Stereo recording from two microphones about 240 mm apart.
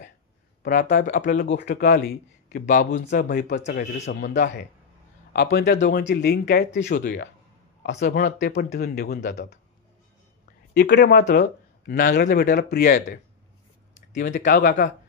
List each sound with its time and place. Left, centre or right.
0.6 s speech: left
1.5 s speech: left
2.0 s speech: left
5.3 s speech: left
10.8 s speech: left
14.3 s speech: left